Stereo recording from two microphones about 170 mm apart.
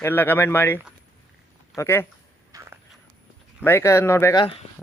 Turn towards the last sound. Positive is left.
turn(degrees=35)  # may be behind; listen again after turning